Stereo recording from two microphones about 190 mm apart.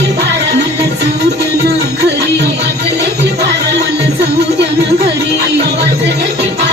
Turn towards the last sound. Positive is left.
turn(degrees=-60)  # may be behind; listen again after turning